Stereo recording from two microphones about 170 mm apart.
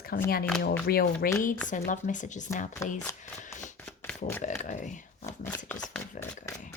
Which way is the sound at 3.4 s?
50° left (ahead or behind).